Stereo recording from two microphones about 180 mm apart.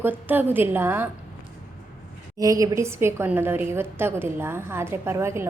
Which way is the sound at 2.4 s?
20° right (ahead or behind).